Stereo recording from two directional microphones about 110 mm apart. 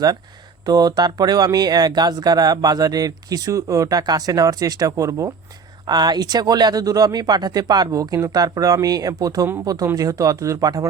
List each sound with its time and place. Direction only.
0.6 s speech: 35° right (ahead or behind)